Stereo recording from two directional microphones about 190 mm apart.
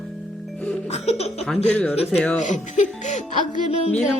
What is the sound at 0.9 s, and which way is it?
Music, 35° left (ahead or behind).